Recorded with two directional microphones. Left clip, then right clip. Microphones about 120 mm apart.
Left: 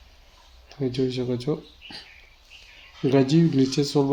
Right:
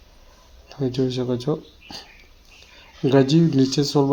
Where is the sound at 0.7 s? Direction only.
20° right (ahead or behind).